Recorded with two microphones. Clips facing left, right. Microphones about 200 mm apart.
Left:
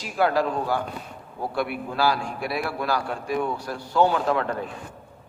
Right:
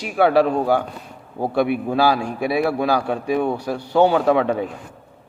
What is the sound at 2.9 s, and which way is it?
A man's voice, 65° right (ahead or behind).